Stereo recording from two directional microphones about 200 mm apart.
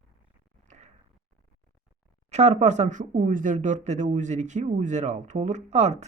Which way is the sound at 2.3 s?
35° right (ahead or behind).